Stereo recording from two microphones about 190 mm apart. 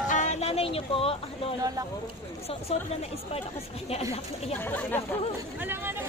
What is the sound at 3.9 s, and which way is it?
Speech, 30° left (ahead or behind).